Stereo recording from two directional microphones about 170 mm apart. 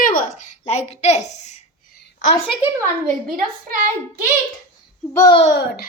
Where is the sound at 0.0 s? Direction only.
55° left (ahead or behind).